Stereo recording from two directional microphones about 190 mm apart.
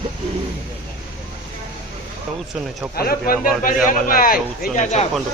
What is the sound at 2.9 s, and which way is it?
Speech, 50° left (ahead or behind).